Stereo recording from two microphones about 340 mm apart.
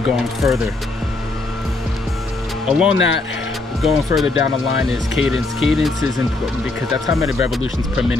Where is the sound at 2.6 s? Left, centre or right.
Centre.